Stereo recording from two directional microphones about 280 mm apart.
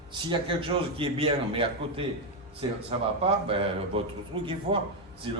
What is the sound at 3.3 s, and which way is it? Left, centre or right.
A man's voice, centre.